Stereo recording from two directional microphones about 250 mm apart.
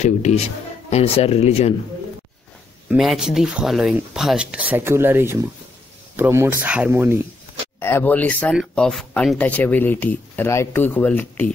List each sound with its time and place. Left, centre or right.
0.0 s speech: left
2.9 s speech: centre
7.8 s speech: centre